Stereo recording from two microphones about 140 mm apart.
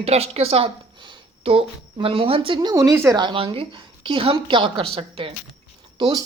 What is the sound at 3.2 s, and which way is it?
Speech, 35° right (ahead or behind).